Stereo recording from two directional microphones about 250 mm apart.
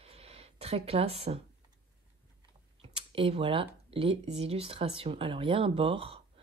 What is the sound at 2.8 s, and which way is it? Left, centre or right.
Speech, right.